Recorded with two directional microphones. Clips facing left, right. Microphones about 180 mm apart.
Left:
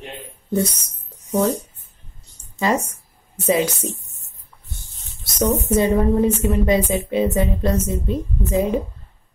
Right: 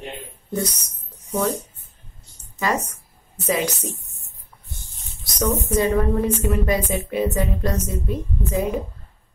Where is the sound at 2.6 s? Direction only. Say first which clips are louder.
Left 3 dB; 25° left (ahead or behind).